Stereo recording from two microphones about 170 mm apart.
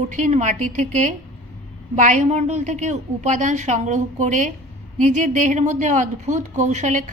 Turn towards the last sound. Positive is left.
turn(degrees=-45)  # may be behind; listen again after turning